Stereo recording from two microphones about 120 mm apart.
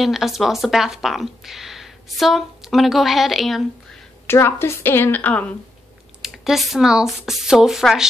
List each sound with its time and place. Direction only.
0.0 s speech: centre (ahead or behind)
4.3 s a woman's voice: 20° left (ahead or behind)
6.2 s speech: centre (ahead or behind)